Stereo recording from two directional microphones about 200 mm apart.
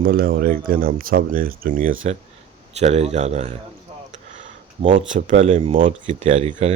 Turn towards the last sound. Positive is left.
turn(degrees=-35)  # may be behind; listen again after turning